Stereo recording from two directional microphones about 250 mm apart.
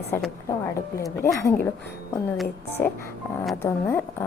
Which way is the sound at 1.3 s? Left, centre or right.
Centre.